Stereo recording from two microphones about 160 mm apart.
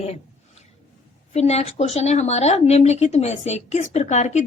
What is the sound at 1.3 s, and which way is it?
A woman's voice, 40° left (ahead or behind).